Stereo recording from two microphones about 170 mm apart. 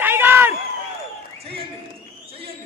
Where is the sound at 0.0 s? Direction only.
10° right (ahead or behind).